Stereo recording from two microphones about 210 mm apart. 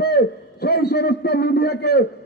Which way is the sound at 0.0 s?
50° left (ahead or behind).